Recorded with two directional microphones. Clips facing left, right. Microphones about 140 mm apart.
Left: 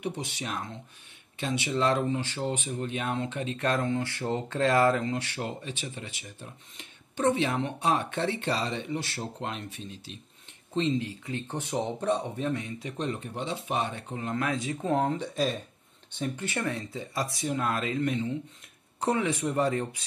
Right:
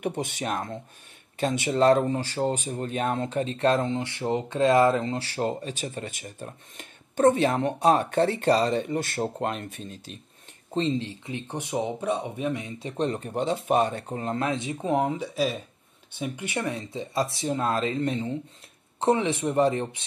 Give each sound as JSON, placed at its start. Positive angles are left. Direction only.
{"t": 0.0, "sound": "speech", "side_deg": -55}
{"t": 10.7, "sound": "speech", "side_deg": -30}
{"t": 14.8, "sound": "speech", "side_deg": -15}